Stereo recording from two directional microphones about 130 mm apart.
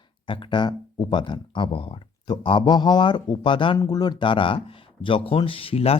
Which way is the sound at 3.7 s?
30° left (ahead or behind).